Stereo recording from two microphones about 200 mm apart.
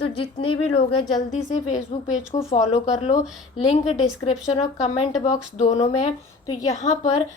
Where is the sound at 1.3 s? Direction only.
35° left (ahead or behind).